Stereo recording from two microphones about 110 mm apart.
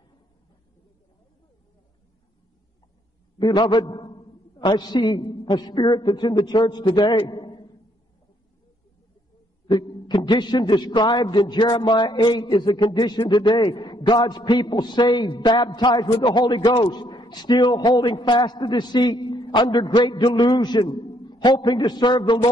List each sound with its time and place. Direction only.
3.3 s a man's voice: 40° left (ahead or behind)
9.7 s a man's voice: 40° left (ahead or behind)